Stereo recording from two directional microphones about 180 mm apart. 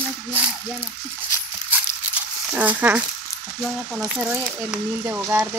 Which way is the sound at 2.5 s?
10° right (ahead or behind).